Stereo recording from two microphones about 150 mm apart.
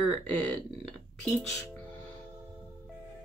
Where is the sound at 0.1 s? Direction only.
10° left (ahead or behind).